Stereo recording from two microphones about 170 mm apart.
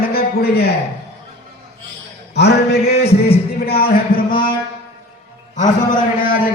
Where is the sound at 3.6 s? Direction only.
65° left (ahead or behind).